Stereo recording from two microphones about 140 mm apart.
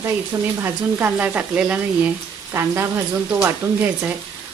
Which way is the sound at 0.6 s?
15° right (ahead or behind).